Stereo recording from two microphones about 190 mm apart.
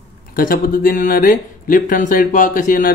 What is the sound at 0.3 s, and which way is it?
Speech, 50° left (ahead or behind).